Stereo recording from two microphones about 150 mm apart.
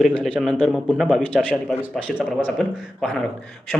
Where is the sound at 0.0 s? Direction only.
10° left (ahead or behind).